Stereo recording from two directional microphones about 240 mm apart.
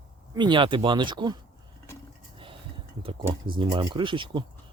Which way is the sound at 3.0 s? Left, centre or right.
Right.